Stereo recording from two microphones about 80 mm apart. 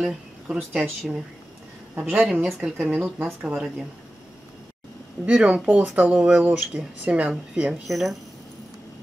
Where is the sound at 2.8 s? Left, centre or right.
Centre.